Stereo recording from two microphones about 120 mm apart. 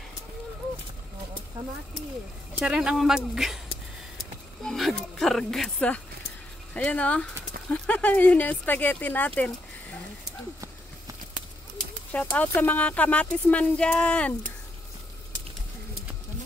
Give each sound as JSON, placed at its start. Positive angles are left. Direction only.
{"t": 2.6, "sound": "speech", "side_deg": -5}
{"t": 4.6, "sound": "speech", "side_deg": 0}
{"t": 12.1, "sound": "speech", "side_deg": 10}